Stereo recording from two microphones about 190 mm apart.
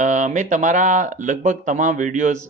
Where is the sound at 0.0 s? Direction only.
40° right (ahead or behind).